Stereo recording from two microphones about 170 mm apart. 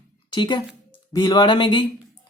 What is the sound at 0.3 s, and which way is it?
Speech, 25° left (ahead or behind).